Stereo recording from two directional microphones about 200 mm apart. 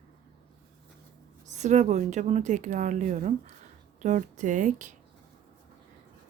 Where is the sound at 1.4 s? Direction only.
35° right (ahead or behind).